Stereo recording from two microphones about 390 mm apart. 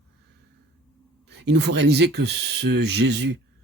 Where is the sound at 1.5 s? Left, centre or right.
Right.